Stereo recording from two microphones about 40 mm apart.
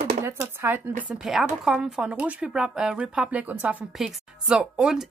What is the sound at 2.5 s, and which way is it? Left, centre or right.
Speech, centre.